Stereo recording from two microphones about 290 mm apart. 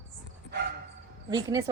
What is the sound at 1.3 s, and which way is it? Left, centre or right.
Speech, centre.